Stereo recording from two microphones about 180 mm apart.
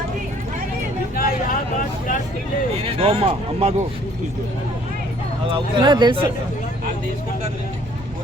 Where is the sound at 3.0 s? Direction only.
30° right (ahead or behind).